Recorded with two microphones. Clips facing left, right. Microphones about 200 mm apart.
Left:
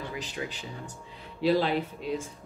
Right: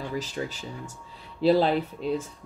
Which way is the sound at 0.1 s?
40° right (ahead or behind).